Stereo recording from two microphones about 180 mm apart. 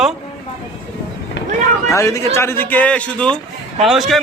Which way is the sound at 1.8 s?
15° left (ahead or behind).